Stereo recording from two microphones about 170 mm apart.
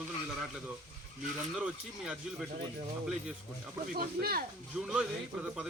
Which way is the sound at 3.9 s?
60° right (ahead or behind).